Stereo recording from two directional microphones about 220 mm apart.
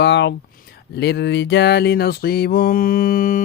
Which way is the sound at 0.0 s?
50° left (ahead or behind).